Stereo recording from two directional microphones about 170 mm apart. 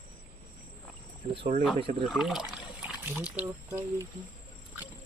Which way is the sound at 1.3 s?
30° right (ahead or behind).